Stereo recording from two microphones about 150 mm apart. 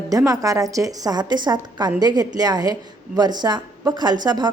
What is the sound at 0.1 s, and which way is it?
A woman's voice, 20° right (ahead or behind).